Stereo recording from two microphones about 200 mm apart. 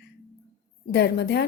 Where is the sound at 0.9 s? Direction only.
55° left (ahead or behind).